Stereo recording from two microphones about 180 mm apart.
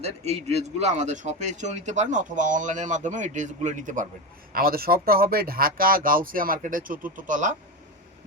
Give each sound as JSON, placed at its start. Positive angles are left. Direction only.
{"t": 0.0, "sound": "a man's voice", "side_deg": -35}
{"t": 4.5, "sound": "speech", "side_deg": -55}